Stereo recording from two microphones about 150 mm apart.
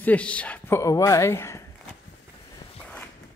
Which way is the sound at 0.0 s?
10° left (ahead or behind).